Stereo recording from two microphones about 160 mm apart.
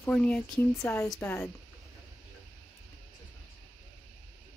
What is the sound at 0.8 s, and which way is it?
Speech, 15° left (ahead or behind).